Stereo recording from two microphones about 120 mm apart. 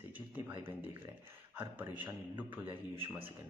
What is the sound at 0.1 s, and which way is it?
Speech, 15° right (ahead or behind).